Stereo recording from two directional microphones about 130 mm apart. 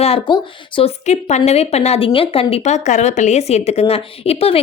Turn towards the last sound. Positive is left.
turn(degrees=50)  # may be behind; listen again after turning